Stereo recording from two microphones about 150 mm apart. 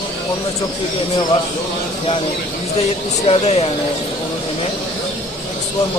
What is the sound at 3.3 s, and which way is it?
Speech, 40° left (ahead or behind).